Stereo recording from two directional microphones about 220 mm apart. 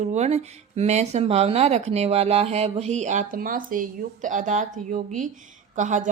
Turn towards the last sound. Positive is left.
turn(degrees=-35)  # may be behind; listen again after turning